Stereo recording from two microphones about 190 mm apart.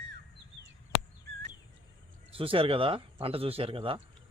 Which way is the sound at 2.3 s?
30° right (ahead or behind).